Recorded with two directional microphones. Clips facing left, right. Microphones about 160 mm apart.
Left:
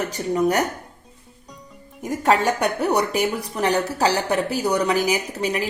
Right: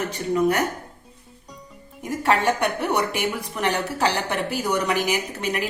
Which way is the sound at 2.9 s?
40° left (ahead or behind).